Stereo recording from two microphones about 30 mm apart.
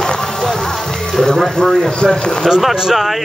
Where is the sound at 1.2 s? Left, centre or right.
Centre.